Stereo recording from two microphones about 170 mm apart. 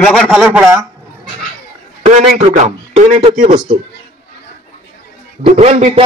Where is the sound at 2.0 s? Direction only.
40° right (ahead or behind).